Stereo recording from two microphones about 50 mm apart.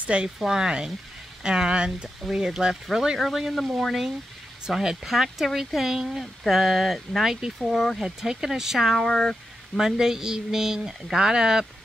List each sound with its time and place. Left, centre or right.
0.0 s speech: right; by 9.1 s centre
9.1 s speech: centre
9.8 s speech: centre